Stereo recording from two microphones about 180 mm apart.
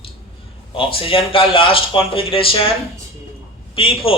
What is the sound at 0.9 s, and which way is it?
Speech, 30° left (ahead or behind).